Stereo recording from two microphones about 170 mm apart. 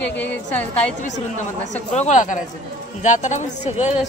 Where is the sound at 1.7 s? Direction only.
45° left (ahead or behind).